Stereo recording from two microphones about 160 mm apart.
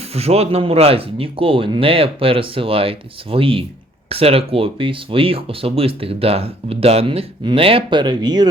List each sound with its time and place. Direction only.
0.1 s speech: 40° right (ahead or behind)